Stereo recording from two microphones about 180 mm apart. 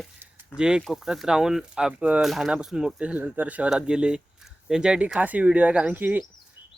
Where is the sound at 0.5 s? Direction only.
5° right (ahead or behind).